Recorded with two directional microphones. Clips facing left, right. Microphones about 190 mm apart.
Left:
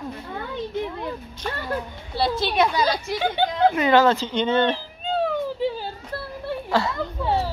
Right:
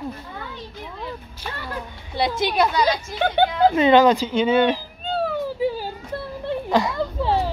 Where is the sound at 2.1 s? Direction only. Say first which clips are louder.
Right 1 dB; 20° right (ahead or behind).